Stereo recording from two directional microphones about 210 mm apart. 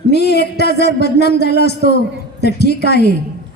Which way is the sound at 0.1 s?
50° left (ahead or behind).